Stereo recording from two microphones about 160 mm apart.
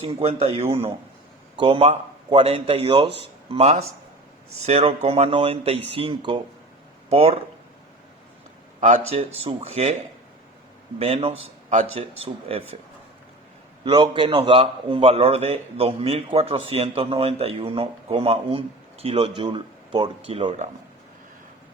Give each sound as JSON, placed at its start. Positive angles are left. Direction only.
{"t": 0.0, "sound": "a man's voice", "side_deg": -40}
{"t": 8.9, "sound": "a man's voice", "side_deg": -40}
{"t": 11.0, "sound": "a man's voice", "side_deg": -40}
{"t": 13.8, "sound": "a man's voice", "side_deg": -30}